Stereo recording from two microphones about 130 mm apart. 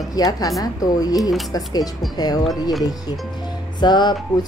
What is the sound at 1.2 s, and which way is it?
Speech, centre (ahead or behind).